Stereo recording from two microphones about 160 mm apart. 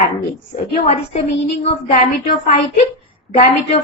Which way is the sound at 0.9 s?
40° left (ahead or behind).